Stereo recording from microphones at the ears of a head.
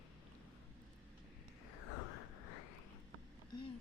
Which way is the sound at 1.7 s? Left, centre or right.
Left.